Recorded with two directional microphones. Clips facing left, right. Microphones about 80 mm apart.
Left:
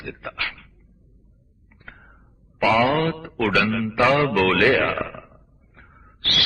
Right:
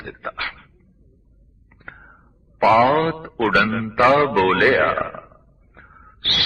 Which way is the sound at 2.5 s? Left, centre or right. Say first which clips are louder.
Right 4 dB; right.